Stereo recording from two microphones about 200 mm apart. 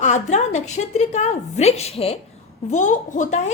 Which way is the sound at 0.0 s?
35° left (ahead or behind).